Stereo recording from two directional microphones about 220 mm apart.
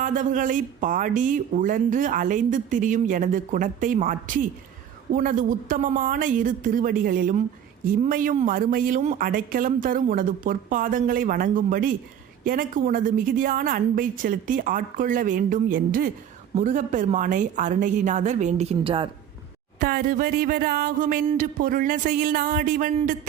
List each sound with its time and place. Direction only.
0.0 s speech: 35° right (ahead or behind)
19.8 s speech: 40° right (ahead or behind)